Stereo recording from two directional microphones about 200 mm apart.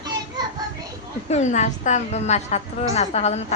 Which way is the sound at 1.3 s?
35° left (ahead or behind).